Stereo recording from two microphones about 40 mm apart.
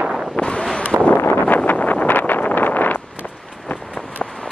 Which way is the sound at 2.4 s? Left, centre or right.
Left.